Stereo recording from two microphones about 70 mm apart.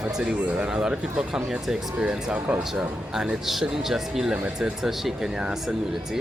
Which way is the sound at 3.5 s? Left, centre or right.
Centre.